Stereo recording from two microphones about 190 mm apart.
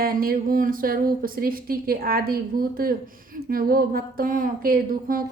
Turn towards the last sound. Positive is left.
turn(degrees=-50)  # may be behind; listen again after turning